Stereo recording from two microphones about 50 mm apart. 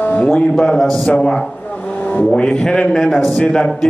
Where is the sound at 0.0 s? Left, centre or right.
Left.